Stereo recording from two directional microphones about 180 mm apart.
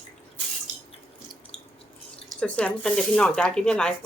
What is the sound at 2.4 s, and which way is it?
Speech, 5° left (ahead or behind).